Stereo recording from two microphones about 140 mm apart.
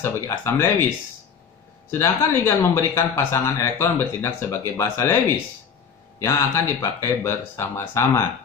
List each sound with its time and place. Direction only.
0.0 s speech: 15° left (ahead or behind)
1.9 s speech: 20° left (ahead or behind)